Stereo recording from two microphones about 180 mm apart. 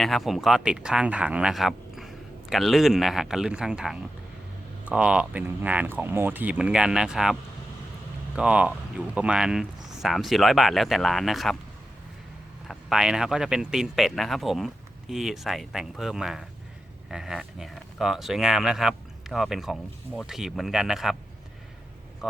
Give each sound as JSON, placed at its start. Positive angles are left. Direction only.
{"t": 0.0, "sound": "speech", "side_deg": 0}
{"t": 8.4, "sound": "speech", "side_deg": -5}
{"t": 12.6, "sound": "speech", "side_deg": 0}
{"t": 22.2, "sound": "a sound", "side_deg": -5}